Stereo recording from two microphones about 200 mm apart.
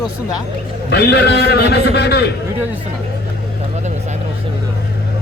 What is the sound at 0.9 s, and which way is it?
A man's voice, 55° left (ahead or behind).